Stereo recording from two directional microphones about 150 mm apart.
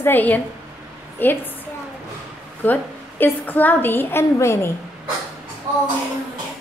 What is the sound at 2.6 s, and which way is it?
A woman's voice, 10° left (ahead or behind).